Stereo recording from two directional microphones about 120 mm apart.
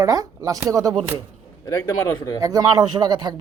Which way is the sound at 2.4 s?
30° right (ahead or behind).